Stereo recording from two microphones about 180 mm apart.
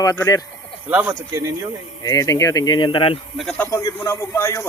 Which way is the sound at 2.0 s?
20° left (ahead or behind).